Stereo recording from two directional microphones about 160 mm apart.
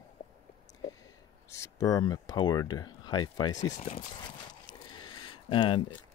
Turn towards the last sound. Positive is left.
turn(degrees=30)  # may be behind; listen again after turning